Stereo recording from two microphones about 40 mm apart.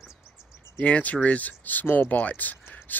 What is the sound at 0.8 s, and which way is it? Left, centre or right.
Speech, left.